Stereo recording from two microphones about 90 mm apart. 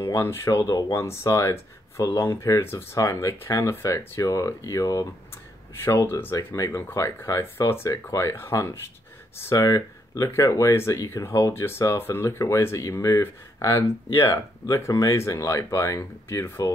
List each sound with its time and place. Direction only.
0.0 s speech: 30° left (ahead or behind)
0.9 s speech: 35° left (ahead or behind)
5.8 s speech: 30° left (ahead or behind)
6.3 s speech: 35° left (ahead or behind)